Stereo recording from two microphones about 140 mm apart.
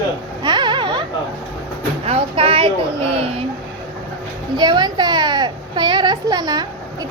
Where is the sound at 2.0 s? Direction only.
45° right (ahead or behind).